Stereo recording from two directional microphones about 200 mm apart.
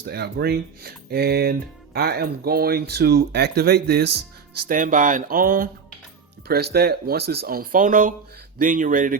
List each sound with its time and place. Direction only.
0.0 s speech: 55° right (ahead or behind)